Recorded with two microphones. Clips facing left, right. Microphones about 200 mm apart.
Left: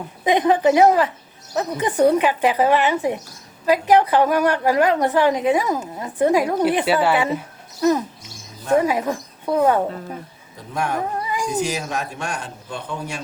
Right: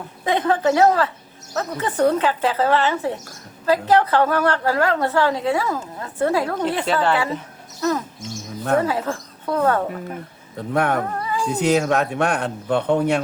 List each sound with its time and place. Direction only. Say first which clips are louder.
0.3 s a woman's voice: left 3 dB; 15° left (ahead or behind)
7.3 s a sound: left 3 dB; 15° left (ahead or behind)
8.8 s speech: left 2 dB; 15° left (ahead or behind)
10.7 s a man's voice: right 4 dB; 60° right (ahead or behind)
11.1 s a sound: right 1 dB; 15° left (ahead or behind)
11.6 s a man's voice: right 7 dB; 60° right (ahead or behind)